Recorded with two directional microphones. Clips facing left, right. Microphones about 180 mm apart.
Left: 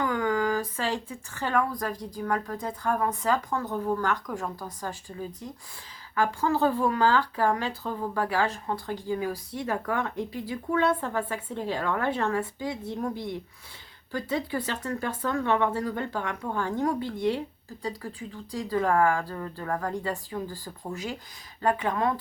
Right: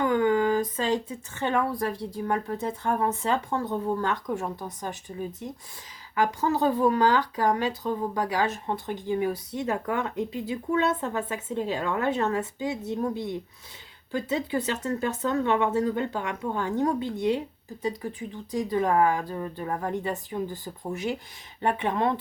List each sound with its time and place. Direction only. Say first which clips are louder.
0.0 s a woman's voice: right 4 dB; 25° right (ahead or behind)